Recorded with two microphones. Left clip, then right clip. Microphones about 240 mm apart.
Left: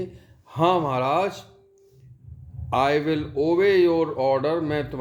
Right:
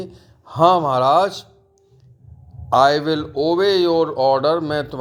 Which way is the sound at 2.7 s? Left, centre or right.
Centre.